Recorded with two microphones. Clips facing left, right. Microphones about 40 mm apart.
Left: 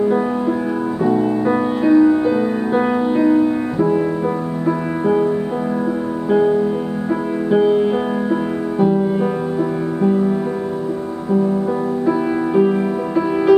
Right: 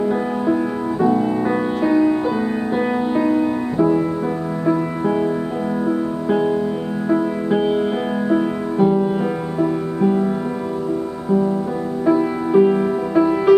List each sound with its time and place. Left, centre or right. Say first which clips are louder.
1.2 s music: left 2 dB; centre
7.1 s music: right 1 dB; centre
12.1 s music: right 3 dB; centre